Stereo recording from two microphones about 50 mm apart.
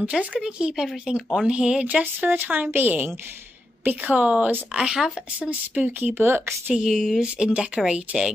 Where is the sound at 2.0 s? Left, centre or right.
Right; by 5.0 s centre.